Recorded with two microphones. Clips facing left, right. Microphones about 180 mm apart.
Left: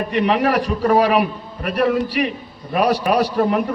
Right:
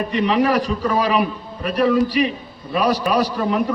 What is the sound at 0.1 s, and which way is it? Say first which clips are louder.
A man's voice: even; 60° left (ahead or behind).